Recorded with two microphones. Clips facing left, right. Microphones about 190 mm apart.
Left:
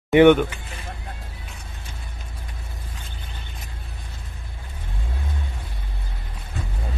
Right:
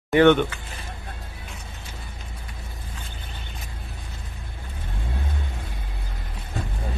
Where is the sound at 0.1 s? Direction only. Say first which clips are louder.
Left 3 dB; 15° left (ahead or behind).